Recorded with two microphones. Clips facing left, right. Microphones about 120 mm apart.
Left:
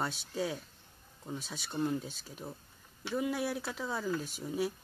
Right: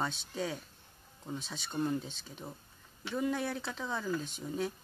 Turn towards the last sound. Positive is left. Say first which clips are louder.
# left 2 dB
turn(degrees=5)  # may be behind; listen again after turning